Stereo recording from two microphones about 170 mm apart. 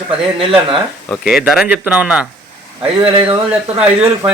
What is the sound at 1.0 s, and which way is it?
A man's voice, 5° right (ahead or behind).